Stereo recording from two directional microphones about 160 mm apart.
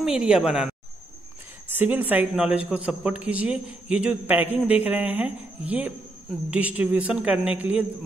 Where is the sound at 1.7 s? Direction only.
10° right (ahead or behind).